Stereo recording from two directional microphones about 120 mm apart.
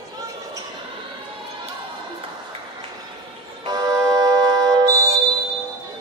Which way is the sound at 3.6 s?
35° right (ahead or behind).